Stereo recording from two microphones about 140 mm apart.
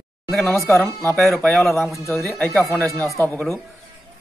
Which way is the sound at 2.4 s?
20° left (ahead or behind).